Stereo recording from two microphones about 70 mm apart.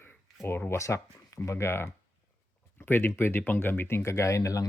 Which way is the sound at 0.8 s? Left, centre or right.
Left.